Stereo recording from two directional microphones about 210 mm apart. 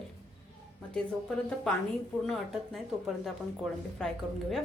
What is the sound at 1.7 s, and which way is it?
A woman's voice, 5° left (ahead or behind).